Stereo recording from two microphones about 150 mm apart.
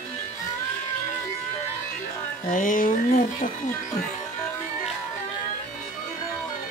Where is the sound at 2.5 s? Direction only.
60° left (ahead or behind).